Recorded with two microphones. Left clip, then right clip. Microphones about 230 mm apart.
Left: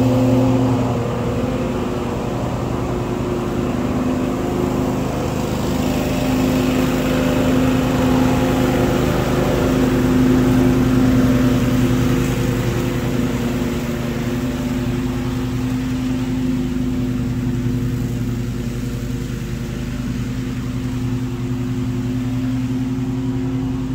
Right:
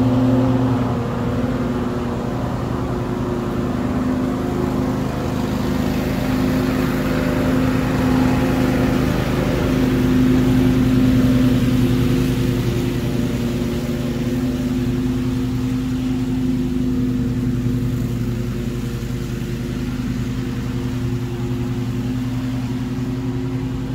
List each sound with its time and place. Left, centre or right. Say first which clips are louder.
0.0 s vehicle: left 2 dB; left
3.9 s vehicle: left 1 dB; left; by 12.5 s centre